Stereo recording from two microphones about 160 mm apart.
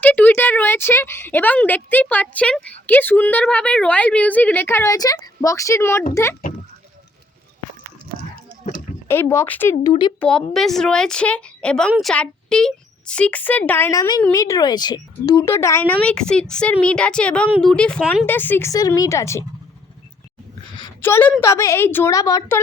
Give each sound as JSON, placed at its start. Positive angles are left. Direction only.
{"t": 0.0, "sound": "a woman's voice", "side_deg": 10}
{"t": 9.0, "sound": "a woman's voice", "side_deg": 15}
{"t": 9.8, "sound": "speech", "side_deg": 30}
{"t": 10.2, "sound": "a woman's voice", "side_deg": 5}
{"t": 11.9, "sound": "a woman's voice", "side_deg": -5}
{"t": 12.1, "sound": "a woman's voice", "side_deg": 5}
{"t": 21.0, "sound": "a woman's voice", "side_deg": 10}